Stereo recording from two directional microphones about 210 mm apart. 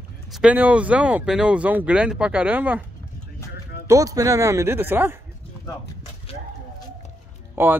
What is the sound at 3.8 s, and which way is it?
Speech, 15° right (ahead or behind).